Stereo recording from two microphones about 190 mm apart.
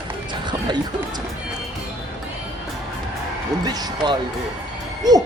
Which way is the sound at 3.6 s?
20° right (ahead or behind).